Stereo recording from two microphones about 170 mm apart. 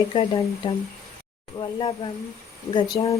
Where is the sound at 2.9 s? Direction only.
30° left (ahead or behind).